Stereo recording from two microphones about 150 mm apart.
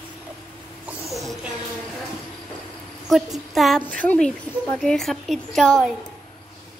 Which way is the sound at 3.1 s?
Centre (ahead or behind).